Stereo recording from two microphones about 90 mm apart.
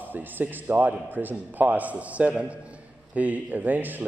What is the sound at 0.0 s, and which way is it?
A man's voice, 20° right (ahead or behind).